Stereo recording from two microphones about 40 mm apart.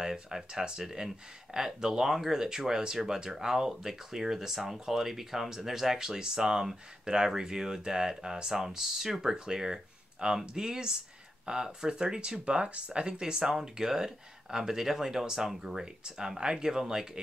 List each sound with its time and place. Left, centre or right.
0.0 s speech: centre